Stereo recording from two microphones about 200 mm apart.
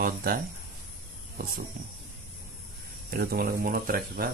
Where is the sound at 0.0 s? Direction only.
45° right (ahead or behind).